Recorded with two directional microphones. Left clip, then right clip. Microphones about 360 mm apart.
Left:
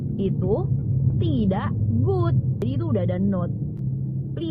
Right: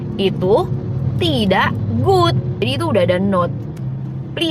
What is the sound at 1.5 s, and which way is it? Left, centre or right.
Speech, right.